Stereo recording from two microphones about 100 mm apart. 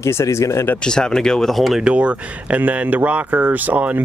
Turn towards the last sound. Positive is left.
turn(degrees=-15)  # may be behind; listen again after turning